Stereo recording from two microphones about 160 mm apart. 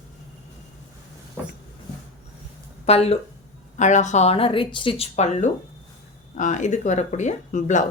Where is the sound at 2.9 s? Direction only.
40° left (ahead or behind).